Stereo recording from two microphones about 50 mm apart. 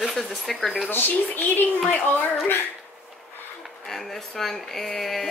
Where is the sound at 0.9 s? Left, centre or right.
Left.